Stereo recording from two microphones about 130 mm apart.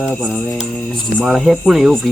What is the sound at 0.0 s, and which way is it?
Mantra, 5° right (ahead or behind).